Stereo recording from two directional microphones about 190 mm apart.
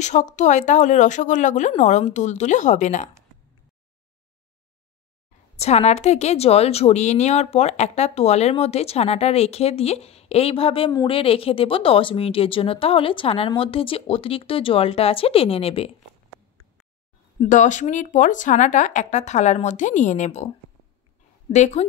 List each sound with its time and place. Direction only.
0.0 s a woman's voice: 40° left (ahead or behind)
5.6 s a woman's voice: 35° left (ahead or behind)
17.4 s a woman's voice: 40° left (ahead or behind)
21.5 s a woman's voice: 35° left (ahead or behind)